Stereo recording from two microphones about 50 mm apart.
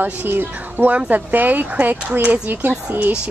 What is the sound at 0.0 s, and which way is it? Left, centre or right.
Speech, right.